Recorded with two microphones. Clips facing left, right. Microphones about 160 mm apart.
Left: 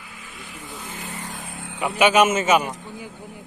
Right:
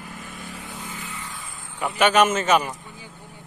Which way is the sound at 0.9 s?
40° left (ahead or behind).